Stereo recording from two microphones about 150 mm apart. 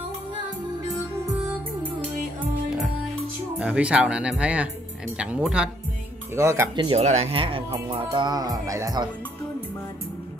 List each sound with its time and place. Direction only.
3.5 s speech: 5° right (ahead or behind)
6.3 s speech: 15° right (ahead or behind)
6.7 s speech: 30° right (ahead or behind)
7.0 s speech: 50° right (ahead or behind)
8.1 s speech: 25° right (ahead or behind)